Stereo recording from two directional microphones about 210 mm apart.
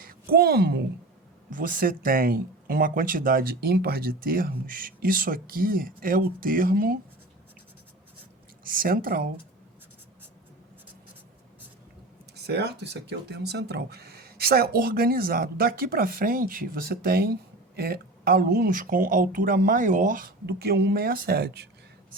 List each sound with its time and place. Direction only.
0.0 s a woman's voice: 45° right (ahead or behind)
1.5 s speech: 40° right (ahead or behind)
8.6 s speech: 40° right (ahead or behind)
12.4 s speech: 50° right (ahead or behind)